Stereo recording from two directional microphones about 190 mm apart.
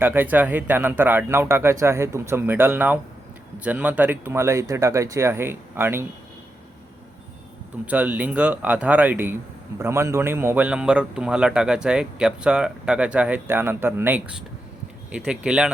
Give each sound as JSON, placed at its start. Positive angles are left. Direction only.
{"t": 0.0, "sound": "speech", "side_deg": -10}
{"t": 7.9, "sound": "speech", "side_deg": -10}